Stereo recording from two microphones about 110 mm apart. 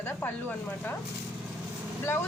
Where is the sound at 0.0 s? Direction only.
20° left (ahead or behind).